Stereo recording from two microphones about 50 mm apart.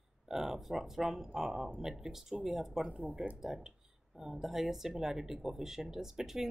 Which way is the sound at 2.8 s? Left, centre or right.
Right.